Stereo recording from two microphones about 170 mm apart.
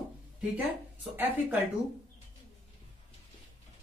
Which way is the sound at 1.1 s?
10° right (ahead or behind).